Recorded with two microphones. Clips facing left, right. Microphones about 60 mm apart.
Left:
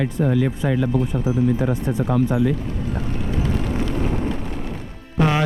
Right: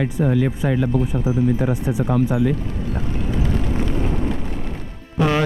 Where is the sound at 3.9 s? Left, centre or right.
Left.